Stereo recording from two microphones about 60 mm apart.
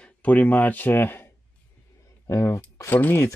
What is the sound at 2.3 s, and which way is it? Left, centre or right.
Speech, left.